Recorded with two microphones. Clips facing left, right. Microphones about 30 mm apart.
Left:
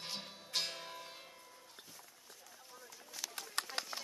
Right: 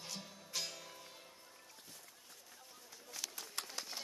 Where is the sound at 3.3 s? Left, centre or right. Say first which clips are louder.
Left 5 dB; left.